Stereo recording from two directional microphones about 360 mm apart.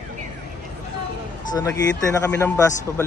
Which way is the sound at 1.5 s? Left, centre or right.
Centre.